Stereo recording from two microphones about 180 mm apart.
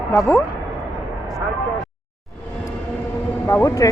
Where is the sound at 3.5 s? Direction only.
15° left (ahead or behind).